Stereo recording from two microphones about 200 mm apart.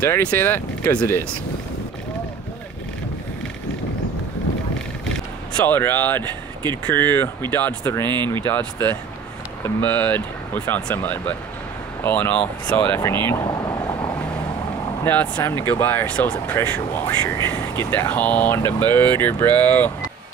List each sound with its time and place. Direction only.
0.0 s speech: 10° left (ahead or behind)
5.7 s speech: 10° left (ahead or behind)
8.0 s speech: 20° right (ahead or behind)
8.5 s speech: 10° left (ahead or behind)
15.0 s speech: 10° left (ahead or behind)